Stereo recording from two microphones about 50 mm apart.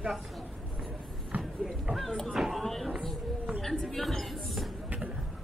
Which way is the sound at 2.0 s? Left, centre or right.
Centre.